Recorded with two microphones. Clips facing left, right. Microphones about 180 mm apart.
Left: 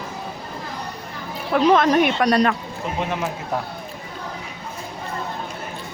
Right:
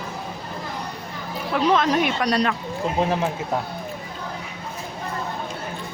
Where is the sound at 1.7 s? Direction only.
55° left (ahead or behind).